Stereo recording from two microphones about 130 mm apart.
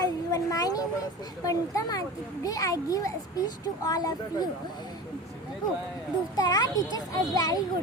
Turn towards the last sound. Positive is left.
turn(degrees=30)  # may be behind; listen again after turning